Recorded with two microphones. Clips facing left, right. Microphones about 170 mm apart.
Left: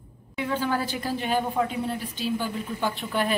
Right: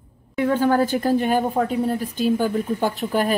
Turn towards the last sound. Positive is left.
turn(degrees=-40)  # may be behind; listen again after turning